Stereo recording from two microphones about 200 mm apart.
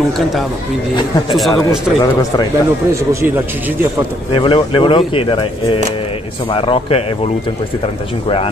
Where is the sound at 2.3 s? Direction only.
20° left (ahead or behind).